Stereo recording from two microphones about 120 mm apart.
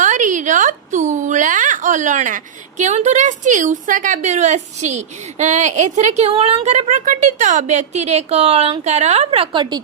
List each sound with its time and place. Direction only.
0.0 s a woman's voice: 90° right; by 9.8 s 40° right (ahead or behind)